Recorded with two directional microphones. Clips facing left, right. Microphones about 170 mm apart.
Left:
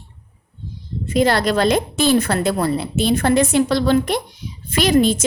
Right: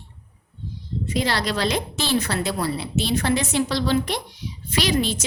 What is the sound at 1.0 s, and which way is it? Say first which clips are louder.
A woman's voice: left 8 dB; 50° left (ahead or behind).